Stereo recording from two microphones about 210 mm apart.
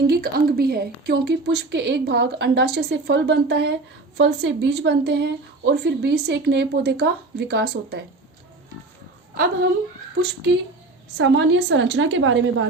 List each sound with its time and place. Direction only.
0.1 s a woman's voice: 45° right (ahead or behind)
9.3 s a woman's voice: 50° right (ahead or behind)
11.2 s a woman's voice: 60° right (ahead or behind)